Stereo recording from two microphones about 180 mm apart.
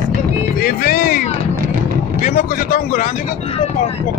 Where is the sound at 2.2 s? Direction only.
50° left (ahead or behind).